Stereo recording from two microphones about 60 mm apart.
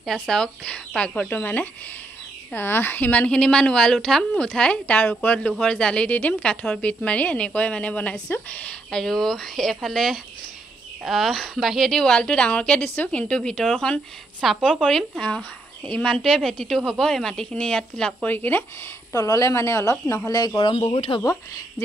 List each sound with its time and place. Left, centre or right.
0.0 s a woman's voice: centre; by 5.5 s left
5.6 s a woman's voice: centre
6.0 s speech: left
8.9 s a woman's voice: centre
14.4 s a woman's voice: centre
18.2 s speech: left
19.1 s speech: left
19.5 s speech: left
20.2 s speech: left
21.3 s speech: left